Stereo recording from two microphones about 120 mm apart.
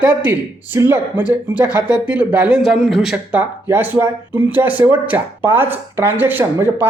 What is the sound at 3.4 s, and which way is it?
Speech, 15° right (ahead or behind).